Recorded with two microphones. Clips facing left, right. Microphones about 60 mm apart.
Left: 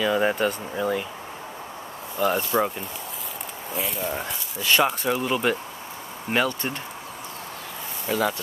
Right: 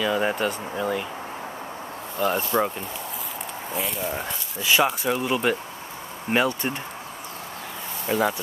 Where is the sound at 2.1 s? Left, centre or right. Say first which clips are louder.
Left 1 dB; centre.